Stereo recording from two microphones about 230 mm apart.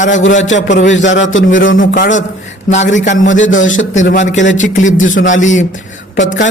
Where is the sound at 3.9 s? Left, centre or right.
Left.